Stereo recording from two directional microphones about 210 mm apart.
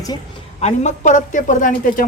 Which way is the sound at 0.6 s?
30° left (ahead or behind).